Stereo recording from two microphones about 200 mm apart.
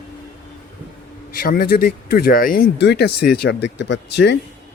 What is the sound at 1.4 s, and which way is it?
Speech, 45° left (ahead or behind).